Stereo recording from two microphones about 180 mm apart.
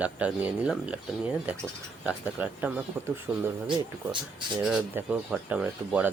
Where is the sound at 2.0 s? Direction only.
5° right (ahead or behind).